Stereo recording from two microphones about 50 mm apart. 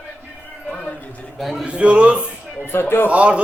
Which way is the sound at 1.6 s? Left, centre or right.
Right.